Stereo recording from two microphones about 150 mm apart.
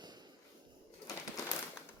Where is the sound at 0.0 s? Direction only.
25° right (ahead or behind).